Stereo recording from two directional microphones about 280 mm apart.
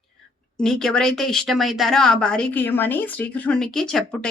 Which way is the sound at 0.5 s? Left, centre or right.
Centre.